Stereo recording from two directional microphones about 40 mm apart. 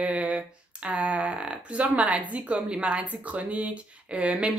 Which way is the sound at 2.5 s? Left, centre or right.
Right.